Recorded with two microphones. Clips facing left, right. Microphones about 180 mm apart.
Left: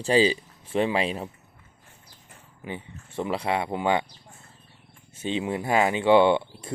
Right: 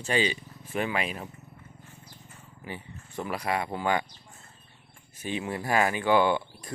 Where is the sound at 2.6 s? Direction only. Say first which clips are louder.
Left 4 dB; 20° left (ahead or behind).